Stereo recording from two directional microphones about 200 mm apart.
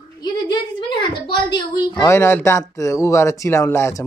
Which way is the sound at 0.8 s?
25° left (ahead or behind).